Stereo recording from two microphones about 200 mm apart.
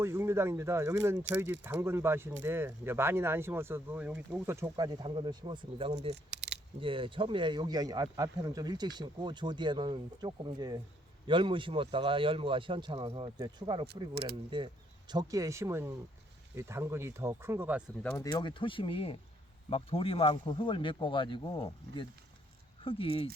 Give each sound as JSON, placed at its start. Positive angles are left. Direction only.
{"t": 0.0, "sound": "speech", "side_deg": -10}
{"t": 6.3, "sound": "a sound", "side_deg": -60}
{"t": 6.7, "sound": "speech", "side_deg": -25}
{"t": 18.0, "sound": "speech", "side_deg": 15}